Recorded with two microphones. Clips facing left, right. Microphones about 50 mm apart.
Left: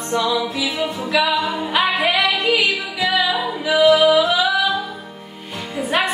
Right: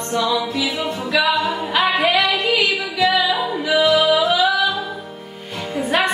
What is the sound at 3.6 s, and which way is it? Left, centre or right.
Music, centre.